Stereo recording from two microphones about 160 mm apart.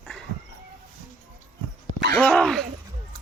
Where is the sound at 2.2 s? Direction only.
5° left (ahead or behind).